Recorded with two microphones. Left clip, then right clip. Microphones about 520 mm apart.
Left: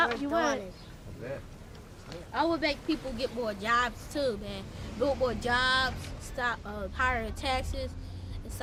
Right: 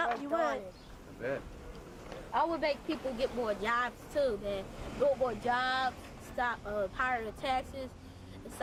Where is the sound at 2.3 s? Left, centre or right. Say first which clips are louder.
Left 2 dB; centre.